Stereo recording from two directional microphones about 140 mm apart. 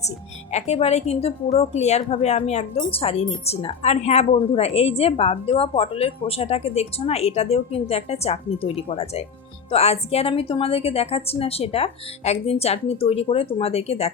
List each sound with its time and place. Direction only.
0.5 s speech: 50° left (ahead or behind)